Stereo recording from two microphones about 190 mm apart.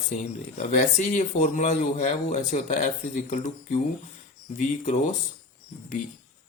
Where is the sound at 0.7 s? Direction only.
40° left (ahead or behind).